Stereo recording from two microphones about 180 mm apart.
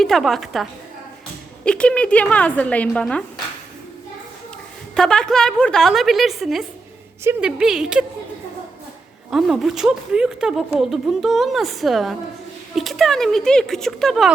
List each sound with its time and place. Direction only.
0.0 s a woman's voice: centre (ahead or behind)
4.9 s a woman's voice: 5° left (ahead or behind)
9.3 s a woman's voice: centre (ahead or behind)